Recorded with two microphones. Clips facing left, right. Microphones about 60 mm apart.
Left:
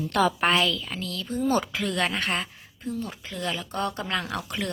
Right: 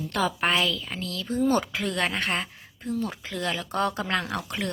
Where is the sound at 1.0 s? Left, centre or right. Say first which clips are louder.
Right 2 dB; right.